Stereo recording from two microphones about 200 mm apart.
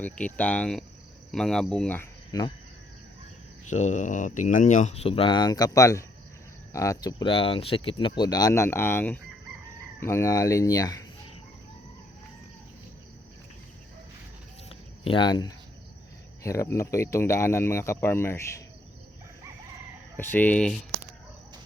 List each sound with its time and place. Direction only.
0.0 s speech: 5° left (ahead or behind)
3.7 s speech: 35° left (ahead or behind); by 11.0 s 20° left (ahead or behind)
15.0 s speech: 25° left (ahead or behind)
20.1 s speech: 10° left (ahead or behind)